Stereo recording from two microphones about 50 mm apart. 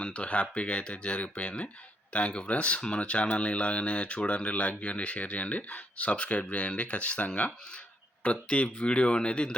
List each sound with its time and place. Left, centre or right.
0.0 s speech: left